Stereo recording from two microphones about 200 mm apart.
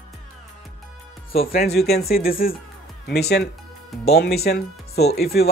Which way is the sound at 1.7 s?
50° left (ahead or behind).